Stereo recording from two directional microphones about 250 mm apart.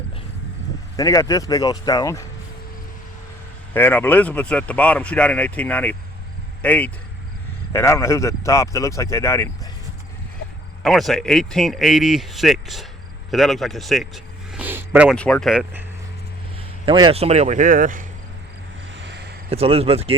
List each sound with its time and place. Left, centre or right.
0.9 s speech: centre
3.8 s speech: centre
10.8 s speech: centre
16.8 s speech: centre
19.0 s a sound: right
19.5 s speech: right